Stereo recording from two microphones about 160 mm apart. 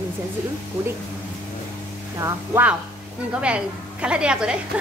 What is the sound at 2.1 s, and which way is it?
Speech, 20° right (ahead or behind).